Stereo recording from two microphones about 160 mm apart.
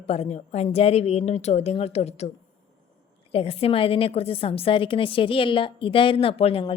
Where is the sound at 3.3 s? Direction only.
40° left (ahead or behind).